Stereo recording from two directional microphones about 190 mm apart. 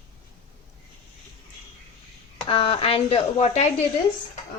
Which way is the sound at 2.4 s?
30° left (ahead or behind).